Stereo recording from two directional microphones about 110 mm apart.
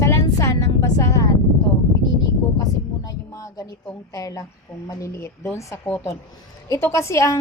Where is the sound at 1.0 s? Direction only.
30° left (ahead or behind).